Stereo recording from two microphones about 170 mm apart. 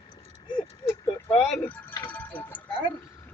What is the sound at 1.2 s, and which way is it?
Speech, 5° left (ahead or behind).